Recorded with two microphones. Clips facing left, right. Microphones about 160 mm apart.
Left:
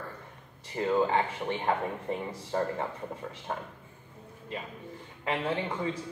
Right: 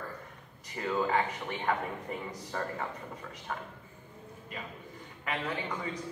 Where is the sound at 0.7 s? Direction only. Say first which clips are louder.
Left 4 dB; 30° left (ahead or behind).